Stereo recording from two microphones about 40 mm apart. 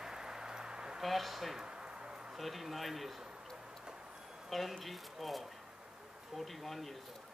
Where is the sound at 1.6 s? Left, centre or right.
Right.